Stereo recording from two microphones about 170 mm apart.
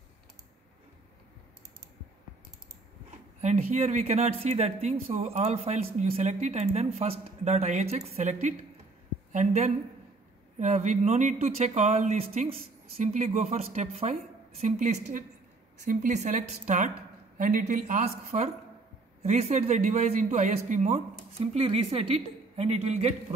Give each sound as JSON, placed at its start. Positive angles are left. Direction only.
{"t": 3.3, "sound": "a woman's voice", "side_deg": -40}